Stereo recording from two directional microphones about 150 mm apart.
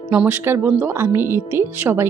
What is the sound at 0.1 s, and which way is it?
Speech, 10° right (ahead or behind).